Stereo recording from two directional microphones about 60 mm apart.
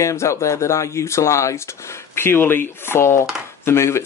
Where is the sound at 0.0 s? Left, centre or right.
Left.